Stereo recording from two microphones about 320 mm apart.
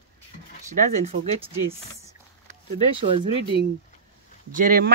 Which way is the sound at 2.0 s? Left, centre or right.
Centre.